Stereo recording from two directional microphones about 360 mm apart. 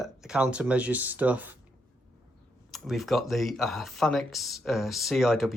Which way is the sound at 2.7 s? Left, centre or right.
Centre.